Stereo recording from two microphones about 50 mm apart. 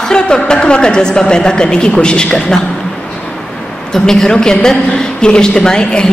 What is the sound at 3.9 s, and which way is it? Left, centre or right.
A woman's voice, centre.